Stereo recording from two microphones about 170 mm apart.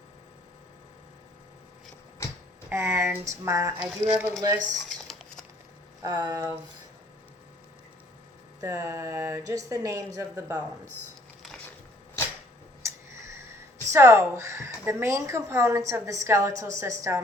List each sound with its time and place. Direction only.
2.6 s a woman's voice: 15° right (ahead or behind)
6.1 s speech: 25° right (ahead or behind)
8.6 s a woman's voice: 15° right (ahead or behind)
12.8 s tick: 15° right (ahead or behind)
13.9 s a woman's voice: 15° right (ahead or behind)